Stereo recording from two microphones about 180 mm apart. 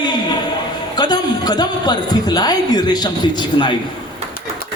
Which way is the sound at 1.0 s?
20° left (ahead or behind).